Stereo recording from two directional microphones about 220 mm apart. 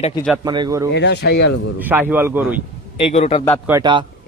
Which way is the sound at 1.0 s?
50° left (ahead or behind).